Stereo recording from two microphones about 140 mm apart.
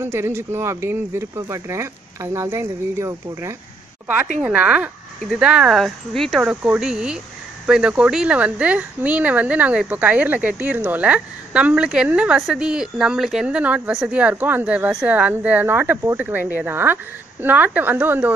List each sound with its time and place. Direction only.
0.0 s speech: 20° right (ahead or behind)
4.4 s speech: 10° right (ahead or behind)
6.4 s speech: 10° right (ahead or behind)